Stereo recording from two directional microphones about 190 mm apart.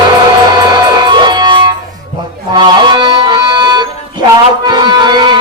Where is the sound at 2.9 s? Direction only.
25° right (ahead or behind).